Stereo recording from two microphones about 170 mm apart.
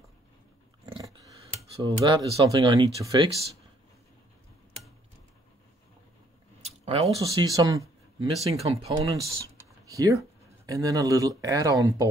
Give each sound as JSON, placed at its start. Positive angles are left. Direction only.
{"t": 1.8, "sound": "speech", "side_deg": -30}
{"t": 6.6, "sound": "a sound", "side_deg": -35}
{"t": 7.4, "sound": "speech", "side_deg": -20}
{"t": 8.2, "sound": "speech", "side_deg": -35}
{"t": 9.0, "sound": "speech", "side_deg": -20}